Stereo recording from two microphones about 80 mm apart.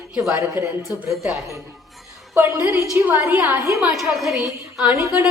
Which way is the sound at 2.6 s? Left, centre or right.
Right.